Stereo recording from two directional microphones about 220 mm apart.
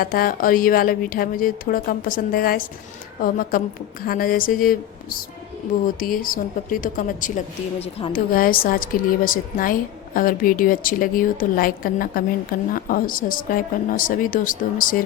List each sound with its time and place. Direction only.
0.0 s a woman's voice: 40° left (ahead or behind)